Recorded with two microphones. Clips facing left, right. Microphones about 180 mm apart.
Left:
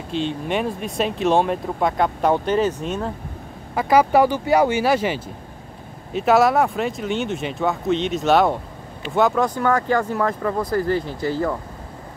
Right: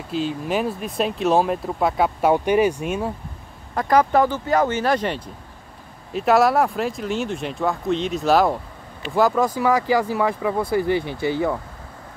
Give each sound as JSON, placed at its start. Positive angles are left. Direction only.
{"t": 0.1, "sound": "speech", "side_deg": -5}
{"t": 3.7, "sound": "speech", "side_deg": 5}
{"t": 10.9, "sound": "speech", "side_deg": -70}